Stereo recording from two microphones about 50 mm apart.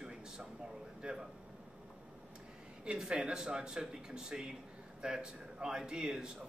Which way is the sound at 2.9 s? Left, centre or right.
Centre.